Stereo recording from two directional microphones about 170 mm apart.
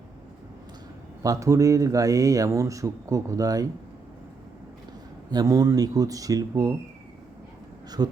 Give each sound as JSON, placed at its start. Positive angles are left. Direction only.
{"t": 1.2, "sound": "speech", "side_deg": -20}
{"t": 5.3, "sound": "speech", "side_deg": -20}
{"t": 7.9, "sound": "speech", "side_deg": -25}